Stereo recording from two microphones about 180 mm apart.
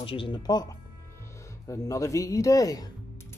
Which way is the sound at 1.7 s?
15° left (ahead or behind).